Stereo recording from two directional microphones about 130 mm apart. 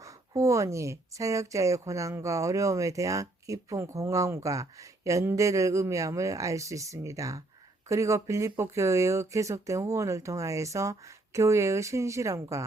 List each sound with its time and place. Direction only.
0.0 s speech: 25° right (ahead or behind)